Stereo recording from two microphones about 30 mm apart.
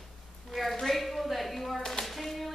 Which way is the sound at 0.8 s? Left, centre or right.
Centre.